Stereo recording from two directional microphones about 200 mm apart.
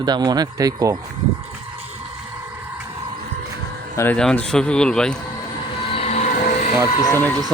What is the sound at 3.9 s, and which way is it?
Speech, 5° left (ahead or behind).